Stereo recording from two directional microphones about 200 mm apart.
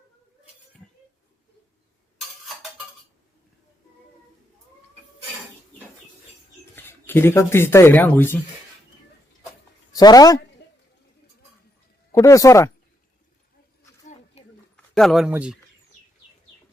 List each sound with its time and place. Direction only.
6.7 s speech: 10° left (ahead or behind)
9.9 s a woman's voice: 20° left (ahead or behind)
12.1 s speech: 15° left (ahead or behind)
14.4 s a sound: 30° left (ahead or behind)
14.9 s speech: centre (ahead or behind)